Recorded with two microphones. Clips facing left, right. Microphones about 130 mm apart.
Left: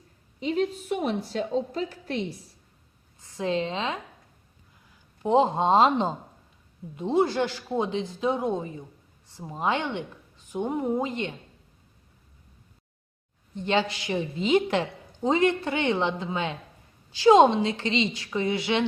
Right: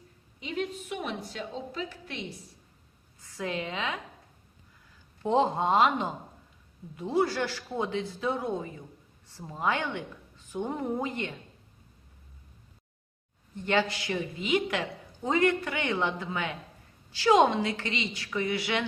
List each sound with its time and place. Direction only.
0.3 s a woman's voice: 35° left (ahead or behind)
3.2 s a woman's voice: 25° left (ahead or behind)
5.2 s a woman's voice: 20° left (ahead or behind)
13.6 s a woman's voice: 20° left (ahead or behind)